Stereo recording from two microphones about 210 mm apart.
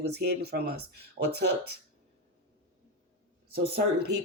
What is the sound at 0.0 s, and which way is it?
Speech, 50° right (ahead or behind).